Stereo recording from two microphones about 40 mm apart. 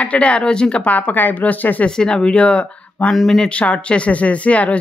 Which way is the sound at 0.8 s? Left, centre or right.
Left.